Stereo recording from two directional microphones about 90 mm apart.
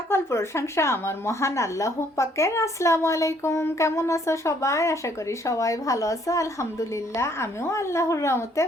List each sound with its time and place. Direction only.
0.1 s a woman's voice: 30° left (ahead or behind)